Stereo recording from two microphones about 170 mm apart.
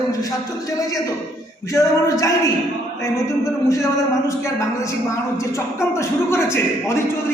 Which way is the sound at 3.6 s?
20° left (ahead or behind).